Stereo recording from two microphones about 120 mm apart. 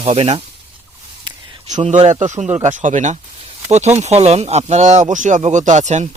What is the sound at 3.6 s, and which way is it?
Speech, 70° right (ahead or behind).